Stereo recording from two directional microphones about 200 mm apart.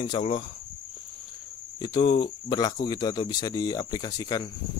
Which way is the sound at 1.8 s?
20° left (ahead or behind).